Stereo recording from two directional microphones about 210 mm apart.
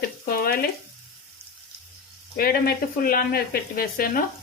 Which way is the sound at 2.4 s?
45° left (ahead or behind).